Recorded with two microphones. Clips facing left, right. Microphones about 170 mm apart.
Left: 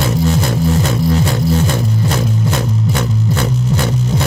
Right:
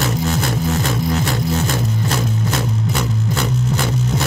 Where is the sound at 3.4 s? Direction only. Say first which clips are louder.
Left 1 dB; 35° left (ahead or behind).